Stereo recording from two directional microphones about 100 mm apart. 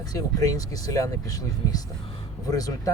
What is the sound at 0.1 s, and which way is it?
Speech, 35° left (ahead or behind).